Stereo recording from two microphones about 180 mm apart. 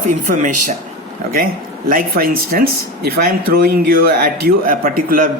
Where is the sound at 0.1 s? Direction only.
45° right (ahead or behind).